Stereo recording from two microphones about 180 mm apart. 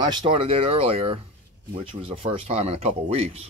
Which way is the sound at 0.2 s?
30° right (ahead or behind).